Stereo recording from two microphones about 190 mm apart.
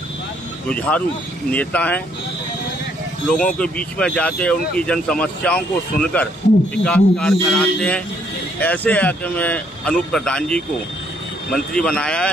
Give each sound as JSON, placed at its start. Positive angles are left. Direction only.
{"t": 0.7, "sound": "speech", "side_deg": 5}
{"t": 3.3, "sound": "speech", "side_deg": 5}